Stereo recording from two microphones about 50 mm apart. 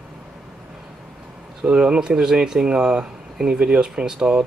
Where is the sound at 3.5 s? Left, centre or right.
Right.